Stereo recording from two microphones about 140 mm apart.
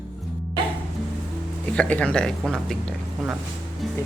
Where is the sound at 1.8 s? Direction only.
10° left (ahead or behind).